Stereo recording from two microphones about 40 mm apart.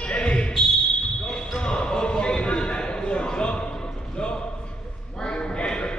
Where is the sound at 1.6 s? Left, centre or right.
Left.